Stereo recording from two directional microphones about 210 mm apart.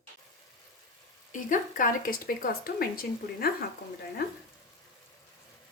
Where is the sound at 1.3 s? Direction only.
40° left (ahead or behind).